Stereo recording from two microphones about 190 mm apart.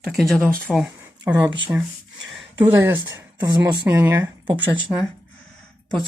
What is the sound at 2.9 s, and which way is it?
Speech, 20° right (ahead or behind).